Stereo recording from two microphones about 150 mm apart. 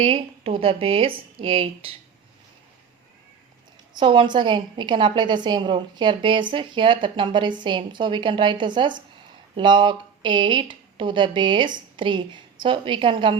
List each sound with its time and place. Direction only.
0.0 s speech: 40° right (ahead or behind)
3.9 s speech: 30° right (ahead or behind)